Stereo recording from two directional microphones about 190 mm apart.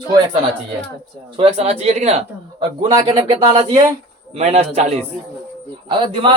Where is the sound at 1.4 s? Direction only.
30° right (ahead or behind).